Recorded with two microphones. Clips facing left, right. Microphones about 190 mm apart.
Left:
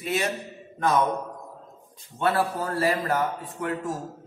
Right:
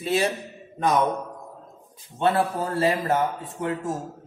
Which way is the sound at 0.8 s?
20° right (ahead or behind).